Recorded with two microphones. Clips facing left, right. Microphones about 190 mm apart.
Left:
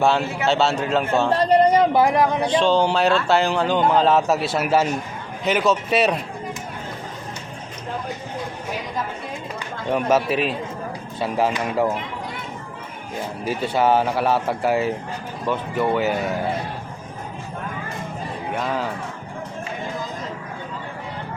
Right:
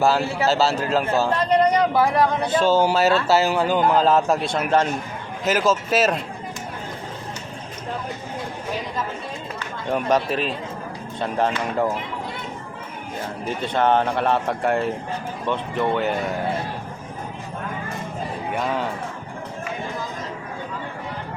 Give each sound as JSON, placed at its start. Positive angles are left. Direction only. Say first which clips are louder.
{"t": 0.0, "sound": "speech", "louder": "even", "side_deg": 0}
{"t": 1.4, "sound": "a man's voice", "louder": "left 4 dB", "side_deg": 30}
{"t": 2.5, "sound": "speech", "louder": "even", "side_deg": -5}
{"t": 9.9, "sound": "speech", "louder": "left 2 dB", "side_deg": 5}
{"t": 13.4, "sound": "speech", "louder": "left 1 dB", "side_deg": 10}
{"t": 18.5, "sound": "speech", "louder": "even", "side_deg": 0}